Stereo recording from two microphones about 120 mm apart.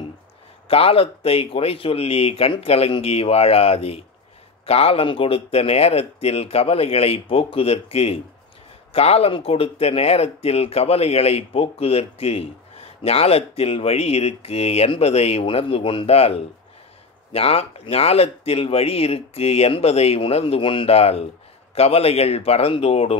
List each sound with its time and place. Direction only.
0.7 s speech: 55° left (ahead or behind)